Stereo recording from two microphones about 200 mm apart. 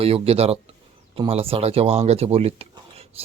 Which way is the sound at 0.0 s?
30° right (ahead or behind).